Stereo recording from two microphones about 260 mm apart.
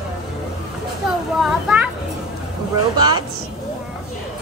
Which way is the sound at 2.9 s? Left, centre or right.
Centre.